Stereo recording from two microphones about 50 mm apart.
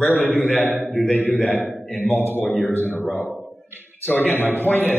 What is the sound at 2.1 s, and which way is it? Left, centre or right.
A man's voice, left.